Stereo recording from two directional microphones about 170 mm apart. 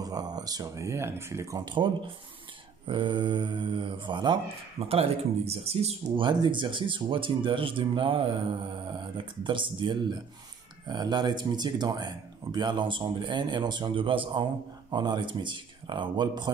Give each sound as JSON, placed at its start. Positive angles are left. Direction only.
{"t": 0.0, "sound": "speech", "side_deg": -20}